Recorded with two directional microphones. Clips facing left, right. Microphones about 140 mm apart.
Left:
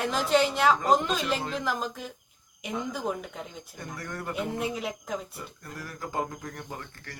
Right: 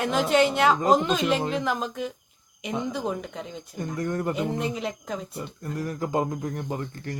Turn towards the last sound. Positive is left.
turn(degrees=-20)  # may be behind; listen again after turning